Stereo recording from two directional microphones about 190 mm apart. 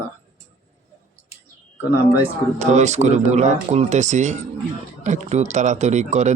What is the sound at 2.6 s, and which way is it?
Speech, 35° right (ahead or behind).